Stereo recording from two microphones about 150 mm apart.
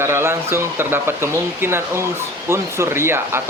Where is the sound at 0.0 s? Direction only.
15° right (ahead or behind).